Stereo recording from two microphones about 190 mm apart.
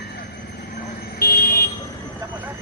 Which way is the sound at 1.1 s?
55° left (ahead or behind).